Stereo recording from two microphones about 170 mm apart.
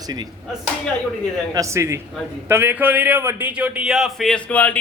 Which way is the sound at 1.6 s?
15° right (ahead or behind).